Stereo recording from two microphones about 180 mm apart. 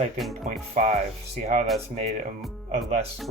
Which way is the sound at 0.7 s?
40° right (ahead or behind).